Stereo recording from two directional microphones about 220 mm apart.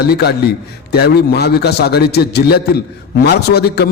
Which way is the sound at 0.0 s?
45° left (ahead or behind).